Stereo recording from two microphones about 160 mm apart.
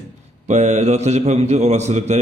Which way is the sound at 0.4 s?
45° right (ahead or behind).